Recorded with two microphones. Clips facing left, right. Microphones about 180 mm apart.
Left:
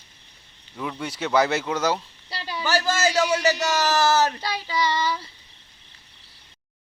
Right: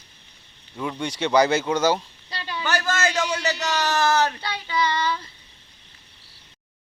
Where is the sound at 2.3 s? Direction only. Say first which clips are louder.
Left 2 dB; 10° left (ahead or behind).